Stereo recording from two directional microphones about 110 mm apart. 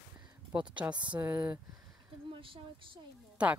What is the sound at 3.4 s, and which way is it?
Speech, 10° right (ahead or behind).